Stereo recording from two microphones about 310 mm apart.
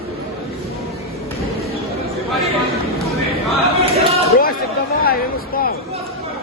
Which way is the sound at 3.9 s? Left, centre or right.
Centre.